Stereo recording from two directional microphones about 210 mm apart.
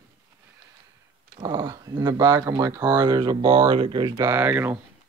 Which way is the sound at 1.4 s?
20° right (ahead or behind).